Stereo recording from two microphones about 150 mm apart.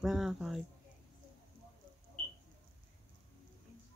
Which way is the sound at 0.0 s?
Centre (ahead or behind).